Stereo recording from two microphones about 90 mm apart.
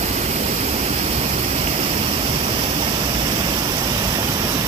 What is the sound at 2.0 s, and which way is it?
Waterfall, 90° right.